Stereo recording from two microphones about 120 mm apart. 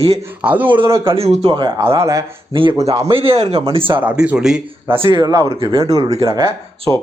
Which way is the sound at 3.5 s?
45° right (ahead or behind).